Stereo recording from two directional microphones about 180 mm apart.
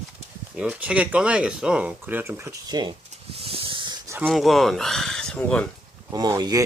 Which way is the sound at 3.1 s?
35° right (ahead or behind).